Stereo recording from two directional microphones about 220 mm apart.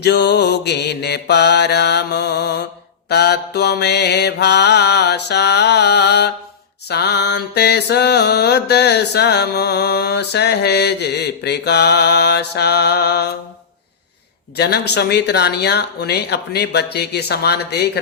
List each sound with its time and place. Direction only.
0.0 s mantra: 50° left (ahead or behind)
14.5 s mantra: 50° left (ahead or behind)